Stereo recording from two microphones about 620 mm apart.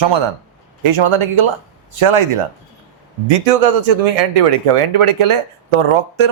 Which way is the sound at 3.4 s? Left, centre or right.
Right.